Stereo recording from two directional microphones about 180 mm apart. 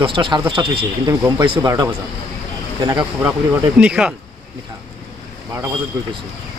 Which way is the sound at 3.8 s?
5° right (ahead or behind).